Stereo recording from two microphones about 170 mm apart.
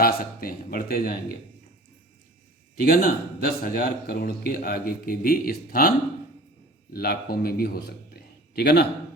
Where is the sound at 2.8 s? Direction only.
60° left (ahead or behind).